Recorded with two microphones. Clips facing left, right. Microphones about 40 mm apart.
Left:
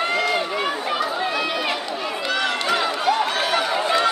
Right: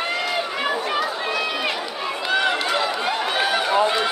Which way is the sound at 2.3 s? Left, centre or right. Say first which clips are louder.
Right 3 dB; centre.